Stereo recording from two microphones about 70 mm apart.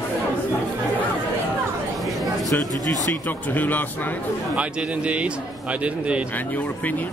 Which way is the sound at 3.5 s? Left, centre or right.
Left.